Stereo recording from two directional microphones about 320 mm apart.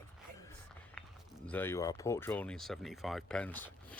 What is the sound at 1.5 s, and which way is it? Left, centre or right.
Speech, centre.